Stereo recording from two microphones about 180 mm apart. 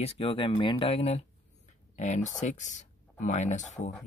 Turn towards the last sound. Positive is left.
turn(degrees=40)  # may be behind; listen again after turning